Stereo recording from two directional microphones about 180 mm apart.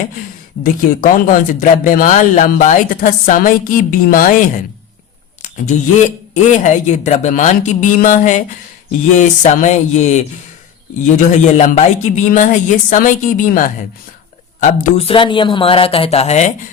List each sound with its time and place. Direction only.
0.6 s speech: 50° left (ahead or behind)
6.3 s speech: 40° left (ahead or behind)